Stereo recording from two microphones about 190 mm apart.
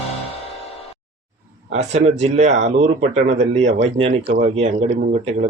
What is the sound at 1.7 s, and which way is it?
Speech, 35° right (ahead or behind).